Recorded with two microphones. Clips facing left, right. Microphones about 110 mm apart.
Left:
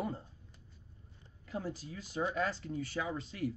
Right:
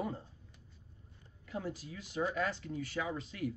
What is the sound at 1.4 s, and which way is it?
A man's voice, 30° left (ahead or behind).